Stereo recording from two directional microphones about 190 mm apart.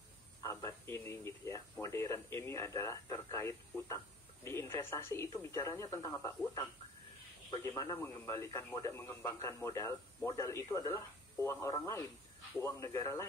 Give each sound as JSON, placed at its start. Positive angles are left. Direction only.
{"t": 0.4, "sound": "a man's voice", "side_deg": 15}